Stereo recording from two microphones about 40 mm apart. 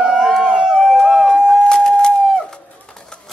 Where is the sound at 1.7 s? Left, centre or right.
Centre.